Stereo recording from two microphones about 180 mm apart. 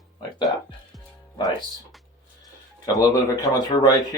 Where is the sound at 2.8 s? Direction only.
20° left (ahead or behind).